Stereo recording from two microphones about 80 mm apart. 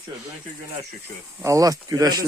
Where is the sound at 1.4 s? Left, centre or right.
Right.